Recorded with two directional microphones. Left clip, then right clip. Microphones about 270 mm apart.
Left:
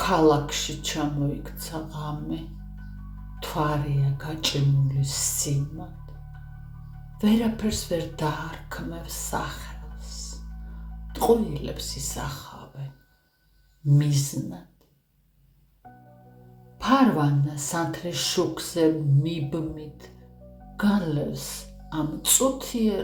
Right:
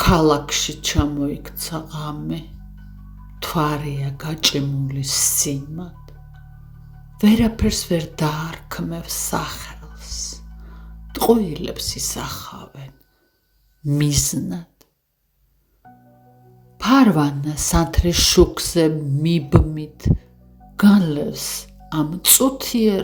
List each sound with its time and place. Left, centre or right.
0.0 s speech: right
3.4 s speech: right
7.2 s speech: right
13.8 s speech: right
16.7 s speech: right